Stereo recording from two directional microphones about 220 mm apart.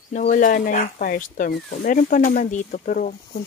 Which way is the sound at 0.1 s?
40° left (ahead or behind).